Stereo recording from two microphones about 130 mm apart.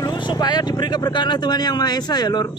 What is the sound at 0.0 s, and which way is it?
Speech, 35° left (ahead or behind).